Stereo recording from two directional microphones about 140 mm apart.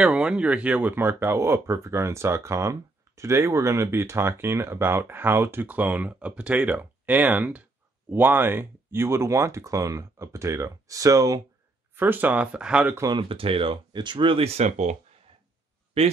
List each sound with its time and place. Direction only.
0.0 s speech: 5° right (ahead or behind)
12.9 s speech: 25° right (ahead or behind)
13.2 s speech: 40° right (ahead or behind)